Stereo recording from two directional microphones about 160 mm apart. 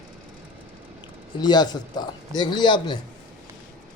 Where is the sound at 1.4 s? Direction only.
25° left (ahead or behind).